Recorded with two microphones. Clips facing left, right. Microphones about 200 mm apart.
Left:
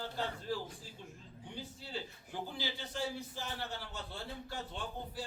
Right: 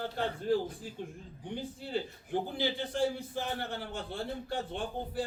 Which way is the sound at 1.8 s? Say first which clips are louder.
Right 11 dB; 55° right (ahead or behind).